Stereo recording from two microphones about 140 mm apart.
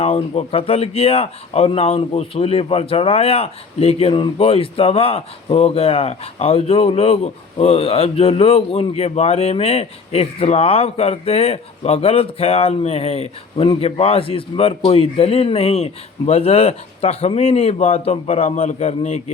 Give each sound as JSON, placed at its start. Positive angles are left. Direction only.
{"t": 0.0, "sound": "speech", "side_deg": 45}